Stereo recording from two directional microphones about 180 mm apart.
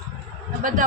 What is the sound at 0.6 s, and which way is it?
Speech, 50° right (ahead or behind).